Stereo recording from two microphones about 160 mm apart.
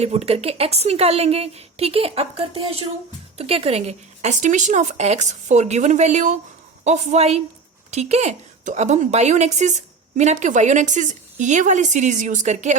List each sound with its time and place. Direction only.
0.0 s a woman's voice: 40° right (ahead or behind)